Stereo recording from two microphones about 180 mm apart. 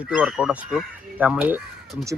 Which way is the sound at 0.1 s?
5° right (ahead or behind).